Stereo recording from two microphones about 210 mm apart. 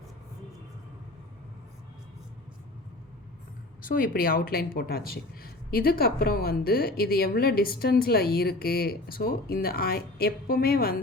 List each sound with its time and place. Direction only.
3.8 s speech: 40° left (ahead or behind)